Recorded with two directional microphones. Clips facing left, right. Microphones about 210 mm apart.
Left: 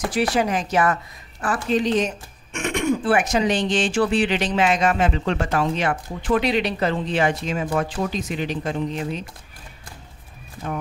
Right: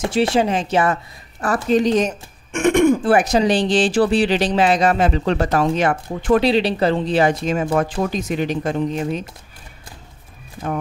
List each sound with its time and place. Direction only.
0.0 s speech: 25° right (ahead or behind)
1.4 s speech: 45° right (ahead or behind)
6.4 s speech: 30° right (ahead or behind); by 9.2 s 45° right (ahead or behind)